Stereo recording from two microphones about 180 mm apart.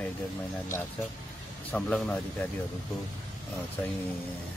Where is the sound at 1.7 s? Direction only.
5° left (ahead or behind).